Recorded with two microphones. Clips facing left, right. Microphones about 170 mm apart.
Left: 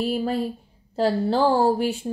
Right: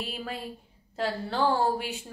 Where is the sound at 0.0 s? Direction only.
35° left (ahead or behind).